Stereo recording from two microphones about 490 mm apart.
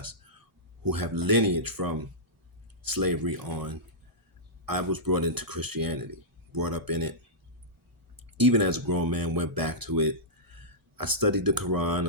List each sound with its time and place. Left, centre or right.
0.9 s speech: right
8.4 s speech: right